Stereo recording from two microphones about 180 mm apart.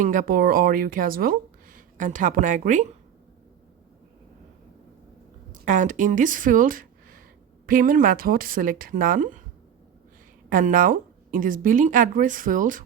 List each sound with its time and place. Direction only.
0.0 s speech: 45° right (ahead or behind)
5.5 s speech: 45° right (ahead or behind)
10.5 s speech: 50° right (ahead or behind)